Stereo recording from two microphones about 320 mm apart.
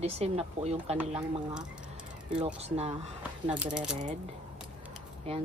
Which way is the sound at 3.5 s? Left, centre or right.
Centre.